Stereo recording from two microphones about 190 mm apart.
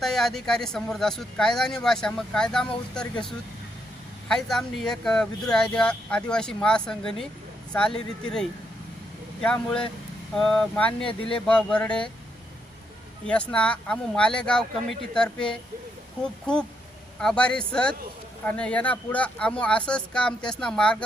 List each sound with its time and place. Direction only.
0.0 s speech: centre (ahead or behind)
11.0 s speech: 25° left (ahead or behind)
11.4 s speech: 5° left (ahead or behind)
13.2 s speech: 5° left (ahead or behind)